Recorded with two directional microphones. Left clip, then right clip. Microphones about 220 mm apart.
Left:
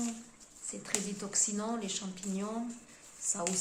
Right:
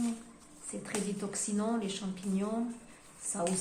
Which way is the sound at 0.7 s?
20° left (ahead or behind).